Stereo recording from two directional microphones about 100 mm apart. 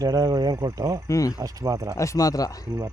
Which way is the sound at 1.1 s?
35° left (ahead or behind).